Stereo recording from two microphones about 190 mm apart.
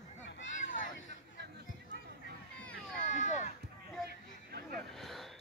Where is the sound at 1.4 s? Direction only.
60° right (ahead or behind).